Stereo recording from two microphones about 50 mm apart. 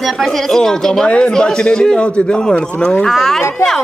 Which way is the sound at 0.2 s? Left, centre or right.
Centre.